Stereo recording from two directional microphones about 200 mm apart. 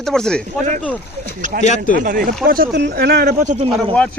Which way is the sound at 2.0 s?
45° right (ahead or behind).